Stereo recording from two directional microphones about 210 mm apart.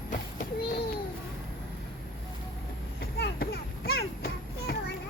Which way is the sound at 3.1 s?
50° left (ahead or behind).